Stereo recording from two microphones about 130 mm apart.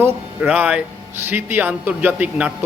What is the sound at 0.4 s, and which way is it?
A man's voice, 10° right (ahead or behind).